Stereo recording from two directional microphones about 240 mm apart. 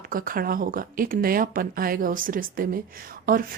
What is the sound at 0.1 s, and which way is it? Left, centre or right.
Speech, right.